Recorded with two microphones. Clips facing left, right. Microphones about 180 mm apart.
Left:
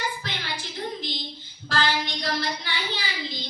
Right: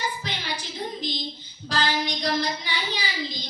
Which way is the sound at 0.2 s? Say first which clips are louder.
Right 1 dB; 15° right (ahead or behind).